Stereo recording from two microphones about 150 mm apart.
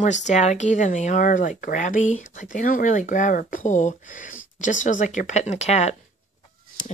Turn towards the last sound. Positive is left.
turn(degrees=55)  # may be behind; listen again after turning